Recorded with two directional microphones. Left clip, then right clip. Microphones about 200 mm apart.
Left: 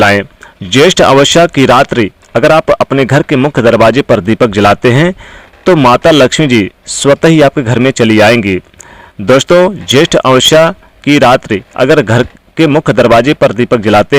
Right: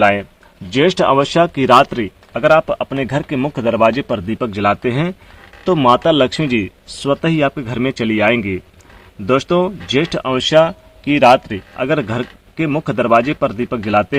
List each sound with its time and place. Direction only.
0.0 s speech: 40° left (ahead or behind)